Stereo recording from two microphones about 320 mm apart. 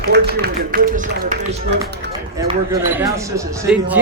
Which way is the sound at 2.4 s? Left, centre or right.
Centre.